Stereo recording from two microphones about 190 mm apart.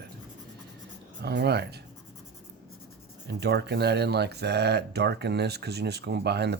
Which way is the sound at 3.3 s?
60° right (ahead or behind).